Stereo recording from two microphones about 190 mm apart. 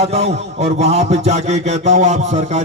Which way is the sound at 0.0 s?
35° right (ahead or behind).